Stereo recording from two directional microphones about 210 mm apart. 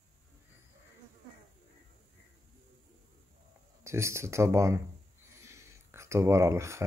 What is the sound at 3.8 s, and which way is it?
Speech, 15° right (ahead or behind).